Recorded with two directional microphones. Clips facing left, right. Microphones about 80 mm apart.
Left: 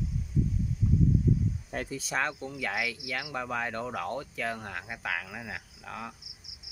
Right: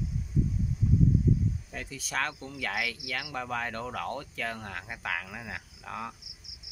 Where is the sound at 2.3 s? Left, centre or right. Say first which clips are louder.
Left 1 dB; centre.